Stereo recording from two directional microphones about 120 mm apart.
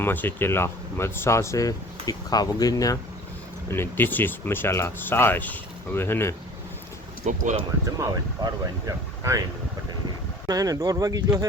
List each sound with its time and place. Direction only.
0.0 s speech: 15° left (ahead or behind)
3.7 s speech: 20° left (ahead or behind)
7.3 s speech: 80° right
7.9 s speech: 25° right (ahead or behind)
10.4 s speech: 30° right (ahead or behind)